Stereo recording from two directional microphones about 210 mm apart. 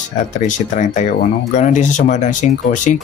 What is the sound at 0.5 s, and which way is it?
Speech, 35° left (ahead or behind).